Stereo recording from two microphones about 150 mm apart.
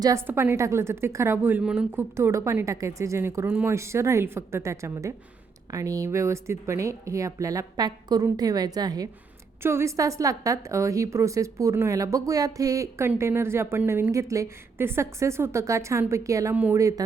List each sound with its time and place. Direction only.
0.0 s a woman's voice: 20° right (ahead or behind)